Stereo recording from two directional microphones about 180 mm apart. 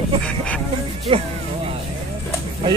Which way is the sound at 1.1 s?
30° right (ahead or behind).